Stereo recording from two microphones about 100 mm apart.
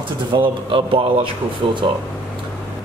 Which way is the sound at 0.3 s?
55° right (ahead or behind).